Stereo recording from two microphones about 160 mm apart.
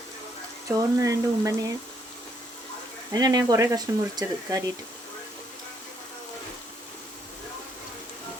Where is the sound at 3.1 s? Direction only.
25° right (ahead or behind).